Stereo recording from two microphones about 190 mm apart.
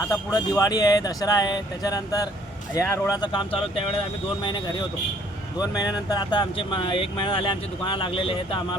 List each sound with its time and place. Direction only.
0.1 s speech: 15° left (ahead or behind)